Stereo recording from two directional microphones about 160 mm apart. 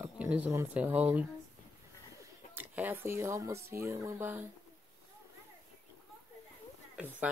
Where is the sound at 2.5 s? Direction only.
10° right (ahead or behind).